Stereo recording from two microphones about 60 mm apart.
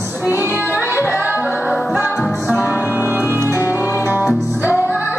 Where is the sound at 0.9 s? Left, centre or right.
Left.